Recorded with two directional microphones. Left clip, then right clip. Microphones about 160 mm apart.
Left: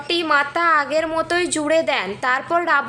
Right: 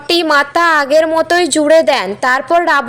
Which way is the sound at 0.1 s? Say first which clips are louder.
Right 7 dB; 40° right (ahead or behind).